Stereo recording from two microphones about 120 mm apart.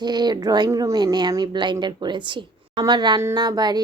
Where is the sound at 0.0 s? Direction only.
35° right (ahead or behind).